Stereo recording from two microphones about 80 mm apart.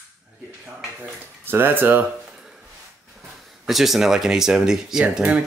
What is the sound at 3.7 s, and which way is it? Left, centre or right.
Speech, centre.